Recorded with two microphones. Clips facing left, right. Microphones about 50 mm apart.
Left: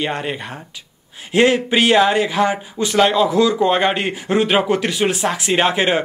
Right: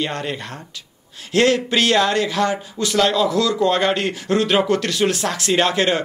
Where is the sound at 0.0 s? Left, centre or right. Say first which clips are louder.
Left 2 dB; centre.